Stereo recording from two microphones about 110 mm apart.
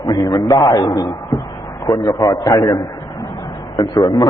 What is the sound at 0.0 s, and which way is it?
A man's voice, 40° left (ahead or behind).